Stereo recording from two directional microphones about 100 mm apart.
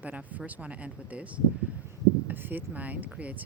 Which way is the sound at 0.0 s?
15° right (ahead or behind).